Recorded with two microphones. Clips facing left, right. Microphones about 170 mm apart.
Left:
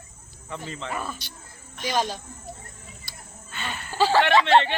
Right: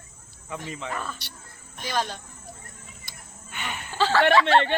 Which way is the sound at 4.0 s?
15° left (ahead or behind).